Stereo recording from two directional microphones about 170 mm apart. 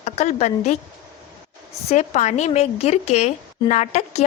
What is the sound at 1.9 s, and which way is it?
Speech, 40° left (ahead or behind).